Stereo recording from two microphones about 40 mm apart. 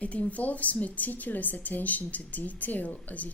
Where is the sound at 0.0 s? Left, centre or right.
Left.